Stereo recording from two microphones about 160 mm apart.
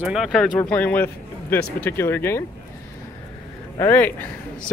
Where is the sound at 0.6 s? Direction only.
10° left (ahead or behind).